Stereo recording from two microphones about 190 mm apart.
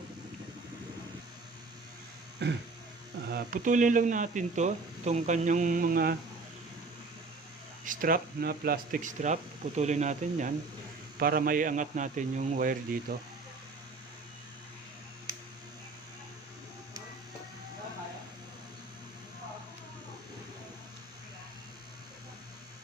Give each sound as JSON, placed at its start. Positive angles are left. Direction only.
{"t": 2.4, "sound": "throat clearing", "side_deg": -65}
{"t": 3.2, "sound": "speech", "side_deg": -50}
{"t": 7.9, "sound": "speech", "side_deg": -50}
{"t": 11.2, "sound": "speech", "side_deg": -50}